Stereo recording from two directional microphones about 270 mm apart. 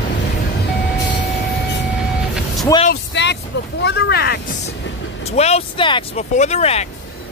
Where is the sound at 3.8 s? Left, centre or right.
Left.